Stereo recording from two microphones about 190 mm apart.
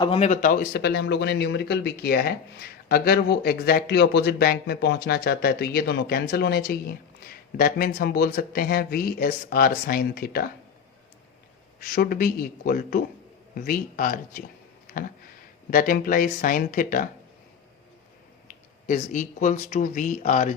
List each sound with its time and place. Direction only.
0.0 s speech: 30° left (ahead or behind); by 10.5 s 50° left (ahead or behind)
11.8 s speech: 50° left (ahead or behind)
18.4 s speech: 45° left (ahead or behind)